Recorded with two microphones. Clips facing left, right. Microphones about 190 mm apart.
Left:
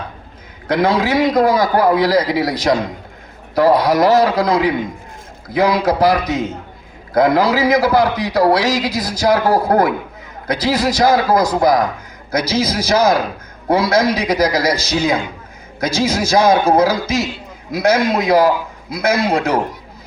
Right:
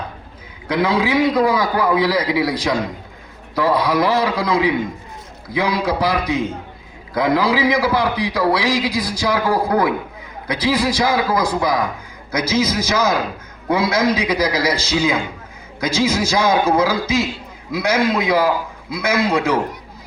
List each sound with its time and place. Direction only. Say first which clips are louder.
0.7 s a man's voice: left 2 dB; 40° left (ahead or behind)